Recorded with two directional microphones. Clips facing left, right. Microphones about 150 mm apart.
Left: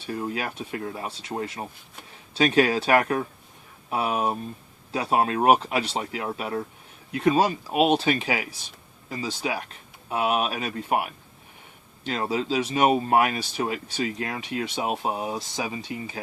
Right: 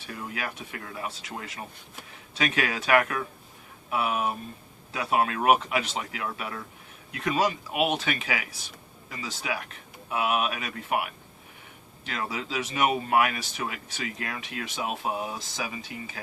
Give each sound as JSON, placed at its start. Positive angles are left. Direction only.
{"t": 0.1, "sound": "speech", "side_deg": 30}